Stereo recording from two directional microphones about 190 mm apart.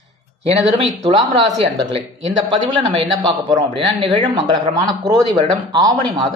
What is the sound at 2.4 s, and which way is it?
A woman's voice, 25° right (ahead or behind).